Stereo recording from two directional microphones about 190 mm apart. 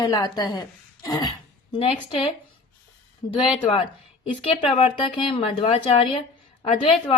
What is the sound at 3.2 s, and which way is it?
Speech, 25° left (ahead or behind).